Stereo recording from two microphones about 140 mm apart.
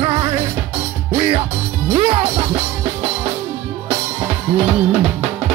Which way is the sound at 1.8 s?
40° right (ahead or behind).